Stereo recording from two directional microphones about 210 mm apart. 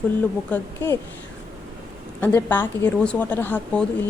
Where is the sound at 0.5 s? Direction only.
10° left (ahead or behind).